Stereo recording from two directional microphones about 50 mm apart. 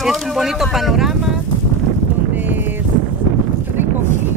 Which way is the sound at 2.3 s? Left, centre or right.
Right.